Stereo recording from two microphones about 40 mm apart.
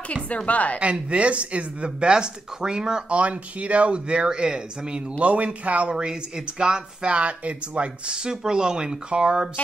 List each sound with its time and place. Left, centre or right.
0.5 s a woman's voice: left
1.1 s speech: right
3.1 s speech: right
5.2 s speech: right
5.9 s speech: centre; by 7.9 s right
8.1 s speech: centre